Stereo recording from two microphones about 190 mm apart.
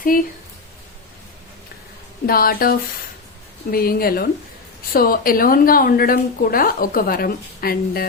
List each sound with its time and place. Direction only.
0.1 s speech: 45° left (ahead or behind)
2.2 s speech: 50° left (ahead or behind)